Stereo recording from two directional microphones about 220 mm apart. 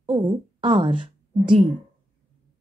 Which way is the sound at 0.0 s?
20° right (ahead or behind).